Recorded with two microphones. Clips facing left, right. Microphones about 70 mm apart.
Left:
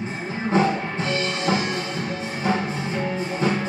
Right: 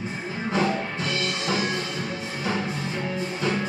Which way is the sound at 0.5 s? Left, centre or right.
Left.